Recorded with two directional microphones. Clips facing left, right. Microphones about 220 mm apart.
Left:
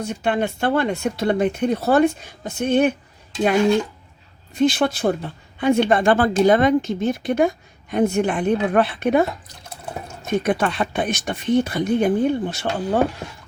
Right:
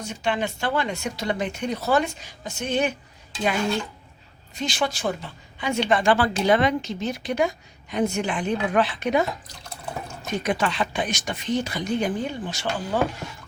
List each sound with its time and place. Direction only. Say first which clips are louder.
0.0 s speech: left 5 dB; 55° left (ahead or behind)
4.5 s a woman's voice: left 9 dB; 55° left (ahead or behind)